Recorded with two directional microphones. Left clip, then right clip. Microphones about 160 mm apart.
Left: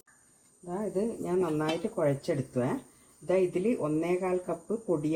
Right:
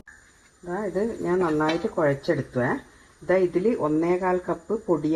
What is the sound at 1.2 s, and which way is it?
Speech, 40° right (ahead or behind).